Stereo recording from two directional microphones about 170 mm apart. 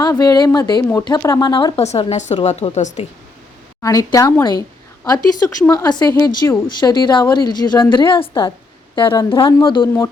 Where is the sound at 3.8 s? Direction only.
20° left (ahead or behind).